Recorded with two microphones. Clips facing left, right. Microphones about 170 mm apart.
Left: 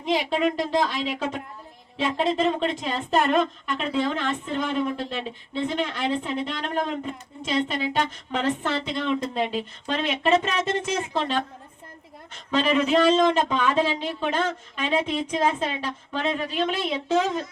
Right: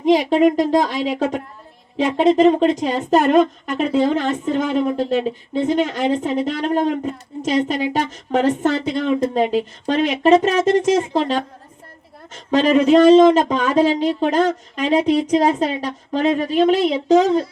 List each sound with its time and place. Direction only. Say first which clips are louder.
0.0 s a woman's voice: right 9 dB; 45° right (ahead or behind)